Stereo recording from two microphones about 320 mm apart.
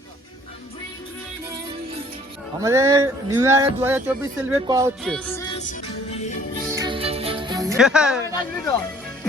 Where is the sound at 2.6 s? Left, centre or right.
Centre.